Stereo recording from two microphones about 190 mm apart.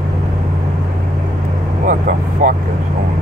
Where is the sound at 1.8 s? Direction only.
45° right (ahead or behind).